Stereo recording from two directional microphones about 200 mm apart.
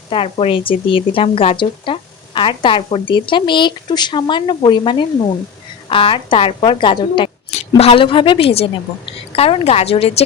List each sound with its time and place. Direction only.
0.1 s speech: 25° left (ahead or behind)